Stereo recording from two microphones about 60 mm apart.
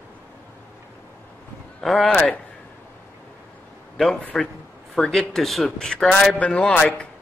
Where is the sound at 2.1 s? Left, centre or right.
Centre.